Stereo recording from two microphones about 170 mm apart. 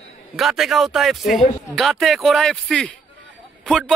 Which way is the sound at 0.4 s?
Centre (ahead or behind).